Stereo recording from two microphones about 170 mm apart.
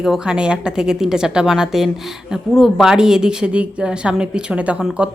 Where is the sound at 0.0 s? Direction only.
5° right (ahead or behind).